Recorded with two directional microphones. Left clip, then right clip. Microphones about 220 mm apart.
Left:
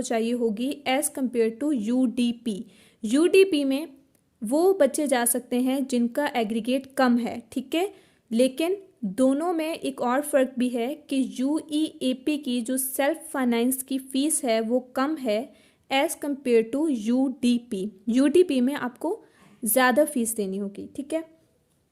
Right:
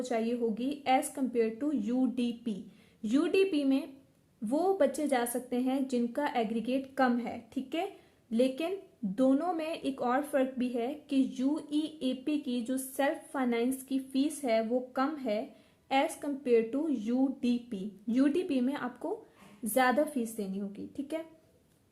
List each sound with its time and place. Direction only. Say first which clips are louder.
0.0 s a woman's voice: left 6 dB; 45° left (ahead or behind)